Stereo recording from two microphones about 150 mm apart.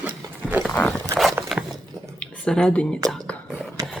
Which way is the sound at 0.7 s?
10° left (ahead or behind).